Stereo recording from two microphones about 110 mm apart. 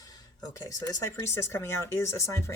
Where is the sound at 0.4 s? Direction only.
30° left (ahead or behind).